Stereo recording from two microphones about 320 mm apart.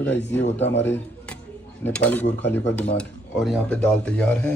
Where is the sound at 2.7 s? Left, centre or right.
Centre.